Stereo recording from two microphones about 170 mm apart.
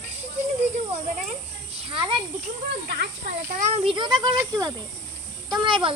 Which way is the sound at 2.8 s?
75° right (ahead or behind).